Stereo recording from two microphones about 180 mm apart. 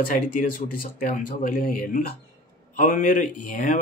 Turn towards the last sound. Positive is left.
turn(degrees=45)  # may be behind; listen again after turning